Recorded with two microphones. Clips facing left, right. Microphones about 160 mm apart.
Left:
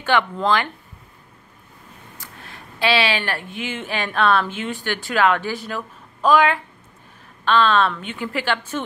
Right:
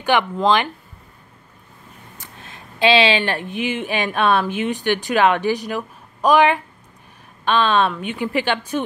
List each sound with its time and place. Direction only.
0.0 s a woman's voice: 15° right (ahead or behind)
2.1 s a woman's voice: 20° right (ahead or behind)